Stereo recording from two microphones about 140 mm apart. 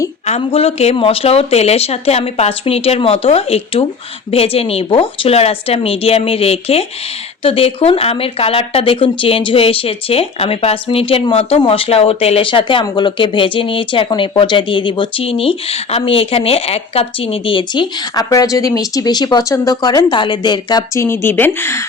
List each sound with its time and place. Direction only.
0.3 s speech: 45° left (ahead or behind); by 21.8 s 15° left (ahead or behind)